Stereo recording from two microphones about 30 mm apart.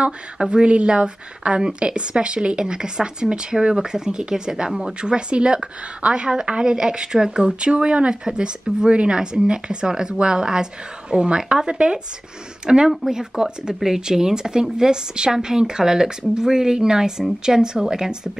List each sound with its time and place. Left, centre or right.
0.0 s a woman's voice: right